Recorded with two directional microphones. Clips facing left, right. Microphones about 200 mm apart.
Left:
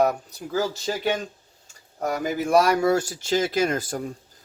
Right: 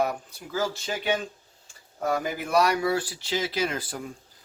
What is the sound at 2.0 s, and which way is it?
Speech, 45° left (ahead or behind).